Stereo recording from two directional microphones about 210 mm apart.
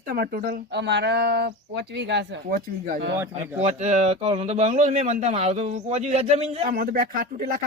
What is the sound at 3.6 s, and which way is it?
Speech, 35° right (ahead or behind).